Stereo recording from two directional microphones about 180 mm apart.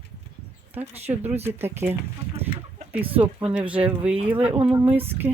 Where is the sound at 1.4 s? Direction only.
10° right (ahead or behind).